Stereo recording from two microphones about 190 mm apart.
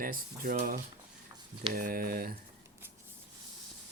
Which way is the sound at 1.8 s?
50° right (ahead or behind).